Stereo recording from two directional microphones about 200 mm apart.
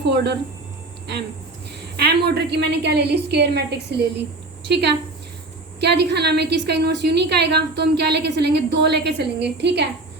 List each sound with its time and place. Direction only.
0.0 s a woman's voice: 60° right (ahead or behind)
2.0 s a woman's voice: 55° right (ahead or behind)